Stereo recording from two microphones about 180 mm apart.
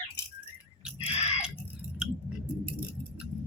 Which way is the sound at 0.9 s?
35° left (ahead or behind).